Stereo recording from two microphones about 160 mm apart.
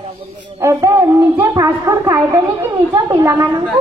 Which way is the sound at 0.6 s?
15° right (ahead or behind).